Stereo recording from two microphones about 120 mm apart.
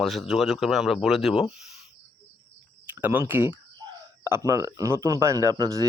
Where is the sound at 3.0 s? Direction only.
15° right (ahead or behind); by 5.8 s 30° right (ahead or behind).